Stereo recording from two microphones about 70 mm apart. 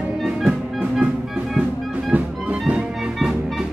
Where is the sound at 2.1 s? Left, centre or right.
Right.